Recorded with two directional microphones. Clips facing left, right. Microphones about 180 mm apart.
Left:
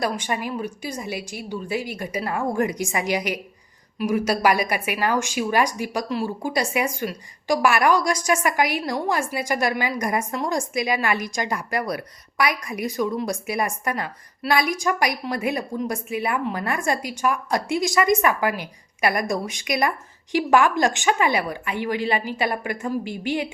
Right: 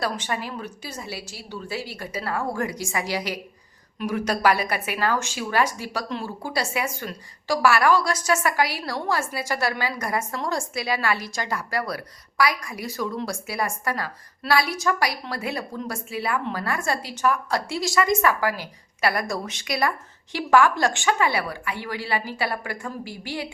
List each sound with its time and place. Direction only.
0.0 s a woman's voice: 15° left (ahead or behind)